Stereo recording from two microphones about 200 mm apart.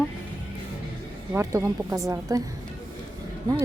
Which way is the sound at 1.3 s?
15° right (ahead or behind).